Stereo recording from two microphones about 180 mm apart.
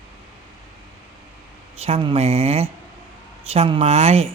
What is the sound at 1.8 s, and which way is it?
Speech, 30° right (ahead or behind).